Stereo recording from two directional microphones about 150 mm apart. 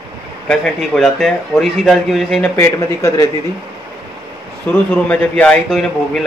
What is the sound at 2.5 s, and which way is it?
Speech, 15° left (ahead or behind).